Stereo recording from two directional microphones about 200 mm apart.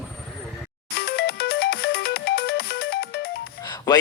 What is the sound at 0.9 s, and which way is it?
Ringtone, 50° left (ahead or behind).